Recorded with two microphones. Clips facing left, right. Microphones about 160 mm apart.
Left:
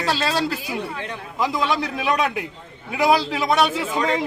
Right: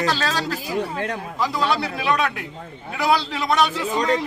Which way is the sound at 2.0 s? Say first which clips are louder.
Even; 15° left (ahead or behind).